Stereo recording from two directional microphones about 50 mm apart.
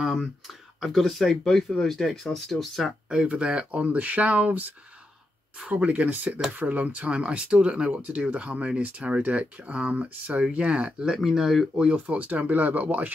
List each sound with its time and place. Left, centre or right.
0.0 s speech: centre
3.1 s speech: centre
11.1 s speech: centre
11.9 s speech: right